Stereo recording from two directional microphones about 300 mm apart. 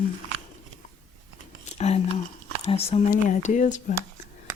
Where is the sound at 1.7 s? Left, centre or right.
Left.